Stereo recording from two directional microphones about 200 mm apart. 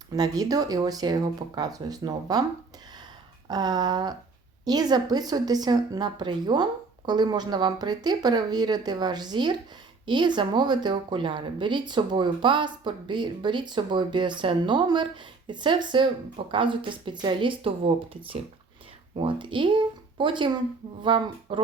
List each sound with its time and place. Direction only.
0.1 s speech: 20° right (ahead or behind)
3.5 s speech: 20° right (ahead or behind)